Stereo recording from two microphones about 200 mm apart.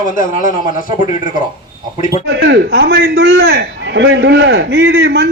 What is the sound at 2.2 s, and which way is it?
A man's voice, 60° right (ahead or behind).